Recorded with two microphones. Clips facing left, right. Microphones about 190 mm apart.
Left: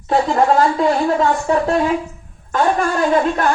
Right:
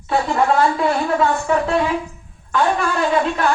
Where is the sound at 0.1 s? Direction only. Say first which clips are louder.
Left 3 dB; 40° left (ahead or behind).